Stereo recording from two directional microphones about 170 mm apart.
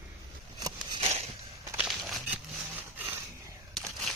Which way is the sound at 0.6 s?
25° right (ahead or behind).